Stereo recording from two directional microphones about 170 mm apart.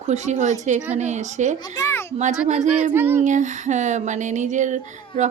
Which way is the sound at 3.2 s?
45° right (ahead or behind).